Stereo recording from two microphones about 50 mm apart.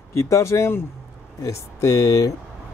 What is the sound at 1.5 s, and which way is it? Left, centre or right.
Speech, left.